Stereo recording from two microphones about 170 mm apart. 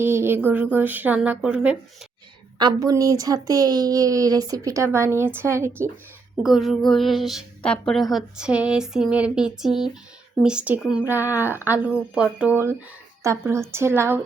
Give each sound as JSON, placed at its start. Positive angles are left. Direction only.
{"t": 0.0, "sound": "speech", "side_deg": -15}
{"t": 2.6, "sound": "speech", "side_deg": -25}
{"t": 6.4, "sound": "speech", "side_deg": 0}